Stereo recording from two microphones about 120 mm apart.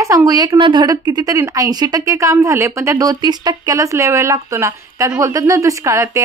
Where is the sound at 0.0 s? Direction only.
30° right (ahead or behind).